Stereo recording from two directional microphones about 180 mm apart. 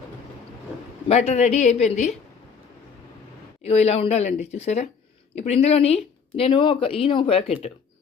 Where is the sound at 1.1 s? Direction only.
35° left (ahead or behind).